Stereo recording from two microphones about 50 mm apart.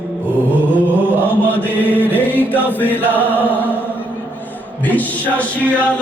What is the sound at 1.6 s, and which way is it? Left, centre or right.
Chant, left.